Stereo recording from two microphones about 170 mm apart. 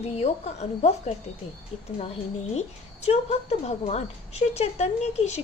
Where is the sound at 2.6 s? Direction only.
40° left (ahead or behind).